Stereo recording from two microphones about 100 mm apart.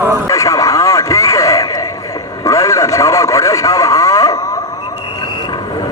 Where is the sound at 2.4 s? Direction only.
30° left (ahead or behind).